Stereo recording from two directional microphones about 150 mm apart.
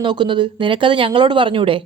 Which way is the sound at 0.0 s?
30° right (ahead or behind).